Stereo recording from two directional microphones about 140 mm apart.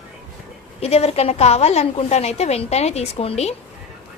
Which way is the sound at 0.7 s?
50° left (ahead or behind).